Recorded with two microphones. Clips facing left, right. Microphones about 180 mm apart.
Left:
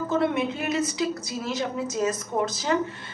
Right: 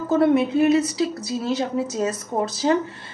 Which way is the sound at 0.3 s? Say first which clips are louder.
Right 10 dB; 35° right (ahead or behind).